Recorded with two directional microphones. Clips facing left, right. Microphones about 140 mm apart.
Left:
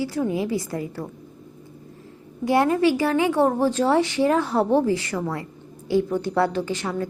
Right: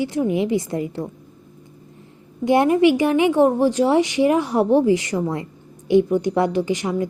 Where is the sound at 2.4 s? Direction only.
20° right (ahead or behind).